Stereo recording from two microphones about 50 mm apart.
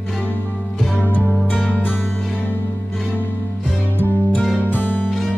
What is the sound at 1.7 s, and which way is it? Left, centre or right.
Music, left.